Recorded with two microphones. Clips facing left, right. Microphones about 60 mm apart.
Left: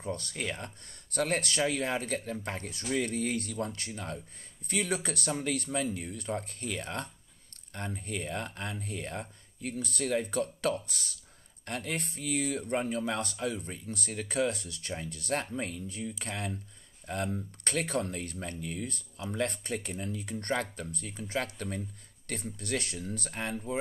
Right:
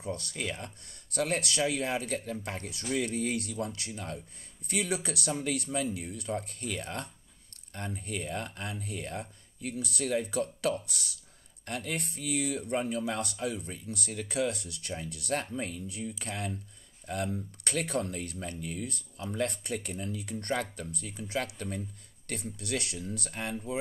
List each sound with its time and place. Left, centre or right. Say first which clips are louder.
0.0 s speech: even; left